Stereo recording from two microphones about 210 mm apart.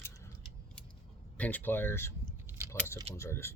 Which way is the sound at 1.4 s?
10° left (ahead or behind).